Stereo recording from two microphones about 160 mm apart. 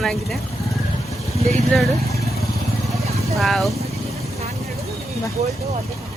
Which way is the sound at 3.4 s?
Centre (ahead or behind).